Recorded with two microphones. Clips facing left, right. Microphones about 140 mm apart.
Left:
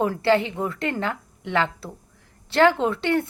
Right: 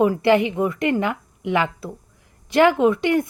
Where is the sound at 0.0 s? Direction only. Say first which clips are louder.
Right 4 dB; 15° right (ahead or behind).